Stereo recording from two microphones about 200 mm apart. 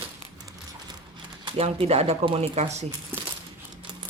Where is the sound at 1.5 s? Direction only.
30° right (ahead or behind).